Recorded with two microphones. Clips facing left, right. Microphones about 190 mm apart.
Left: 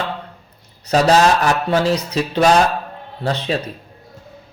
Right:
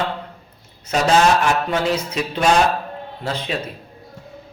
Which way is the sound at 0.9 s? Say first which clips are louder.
Left 2 dB; 35° left (ahead or behind).